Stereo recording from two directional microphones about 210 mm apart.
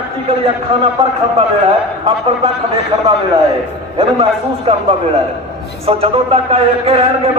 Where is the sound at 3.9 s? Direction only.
25° right (ahead or behind).